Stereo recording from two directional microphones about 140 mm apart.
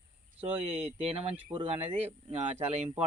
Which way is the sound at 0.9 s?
45° right (ahead or behind).